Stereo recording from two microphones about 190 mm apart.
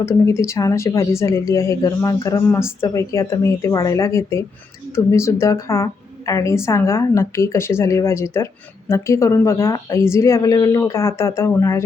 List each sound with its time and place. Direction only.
0.0 s a woman's voice: 15° left (ahead or behind)